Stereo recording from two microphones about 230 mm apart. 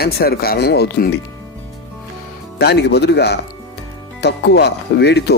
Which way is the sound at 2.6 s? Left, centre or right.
Left.